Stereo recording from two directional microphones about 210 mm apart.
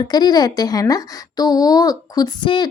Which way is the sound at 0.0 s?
20° left (ahead or behind).